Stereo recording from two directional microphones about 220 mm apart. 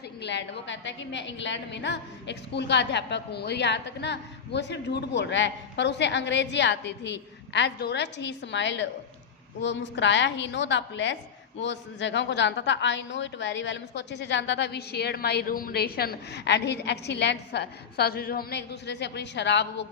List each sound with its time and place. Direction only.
0.2 s a woman's voice: 50° left (ahead or behind)